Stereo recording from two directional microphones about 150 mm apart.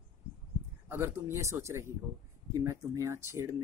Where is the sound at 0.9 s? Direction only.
15° right (ahead or behind).